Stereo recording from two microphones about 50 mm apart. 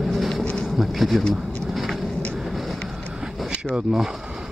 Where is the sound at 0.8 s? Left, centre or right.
Centre.